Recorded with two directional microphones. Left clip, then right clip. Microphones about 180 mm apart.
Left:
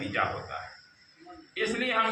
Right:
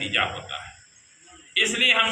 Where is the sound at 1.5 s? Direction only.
15° right (ahead or behind).